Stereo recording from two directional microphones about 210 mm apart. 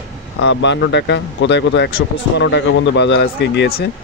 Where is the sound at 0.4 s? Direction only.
60° left (ahead or behind).